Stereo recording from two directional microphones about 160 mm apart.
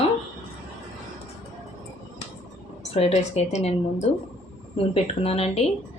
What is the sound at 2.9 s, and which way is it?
A woman's voice, 40° left (ahead or behind).